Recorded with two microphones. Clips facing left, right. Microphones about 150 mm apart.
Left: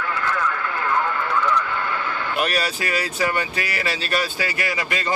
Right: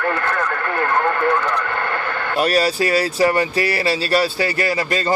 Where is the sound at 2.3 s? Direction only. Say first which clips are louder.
Right 7 dB; 35° right (ahead or behind).